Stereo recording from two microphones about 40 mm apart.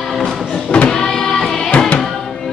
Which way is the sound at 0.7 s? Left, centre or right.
Left.